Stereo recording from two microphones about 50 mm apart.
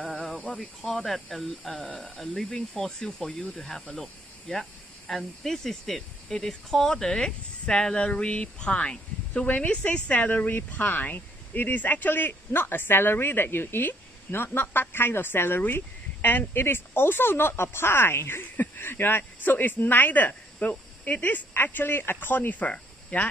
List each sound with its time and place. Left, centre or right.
0.6 s speech: centre; by 23.3 s left